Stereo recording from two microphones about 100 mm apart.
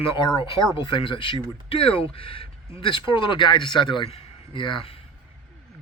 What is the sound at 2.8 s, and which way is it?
A man's voice, 55° left (ahead or behind).